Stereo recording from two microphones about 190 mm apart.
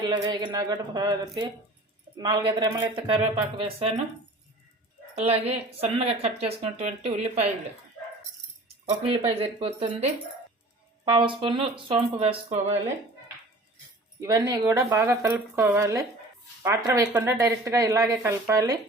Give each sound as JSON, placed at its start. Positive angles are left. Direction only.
{"t": 0.0, "sound": "speech", "side_deg": -20}
{"t": 5.1, "sound": "speech", "side_deg": -35}
{"t": 8.9, "sound": "speech", "side_deg": -30}
{"t": 14.2, "sound": "speech", "side_deg": -20}